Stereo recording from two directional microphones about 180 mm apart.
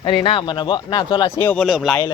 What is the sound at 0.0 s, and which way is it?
Speech, 25° left (ahead or behind).